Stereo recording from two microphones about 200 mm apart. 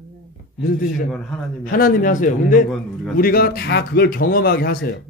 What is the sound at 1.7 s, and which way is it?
A man's voice, 45° left (ahead or behind).